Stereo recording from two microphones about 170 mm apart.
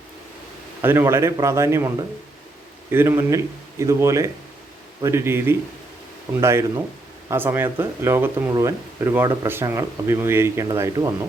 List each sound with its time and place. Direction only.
0.8 s speech: 15° right (ahead or behind)